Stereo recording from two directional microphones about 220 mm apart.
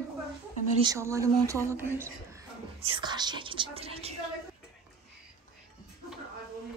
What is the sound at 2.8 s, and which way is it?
Speech, 25° right (ahead or behind).